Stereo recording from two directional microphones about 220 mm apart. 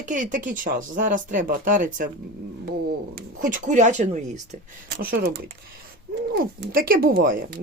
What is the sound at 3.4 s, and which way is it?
Speech, 35° right (ahead or behind).